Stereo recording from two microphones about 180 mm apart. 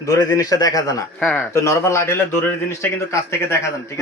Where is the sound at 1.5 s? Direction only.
15° left (ahead or behind).